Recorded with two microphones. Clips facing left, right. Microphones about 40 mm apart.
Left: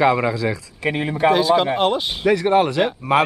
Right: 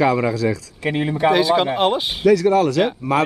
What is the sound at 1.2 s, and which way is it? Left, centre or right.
Speech, centre.